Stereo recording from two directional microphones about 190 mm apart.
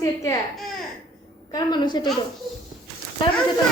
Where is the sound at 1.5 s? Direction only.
20° left (ahead or behind).